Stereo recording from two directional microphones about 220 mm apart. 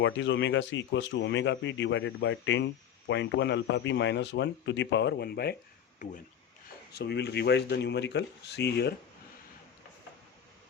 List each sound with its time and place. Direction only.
0.0 s a man's voice: 55° left (ahead or behind)
6.0 s speech: 35° left (ahead or behind)
6.9 s a man's voice: 50° left (ahead or behind)